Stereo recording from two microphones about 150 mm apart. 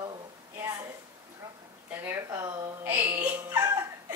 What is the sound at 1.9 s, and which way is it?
Speech, 15° right (ahead or behind).